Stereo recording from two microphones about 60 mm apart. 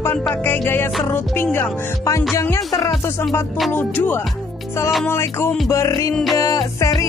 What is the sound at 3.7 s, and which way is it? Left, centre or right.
Music, left.